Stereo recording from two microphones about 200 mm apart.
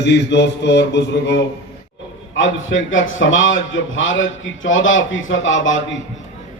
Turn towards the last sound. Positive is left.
turn(degrees=70)  # may be behind; listen again after turning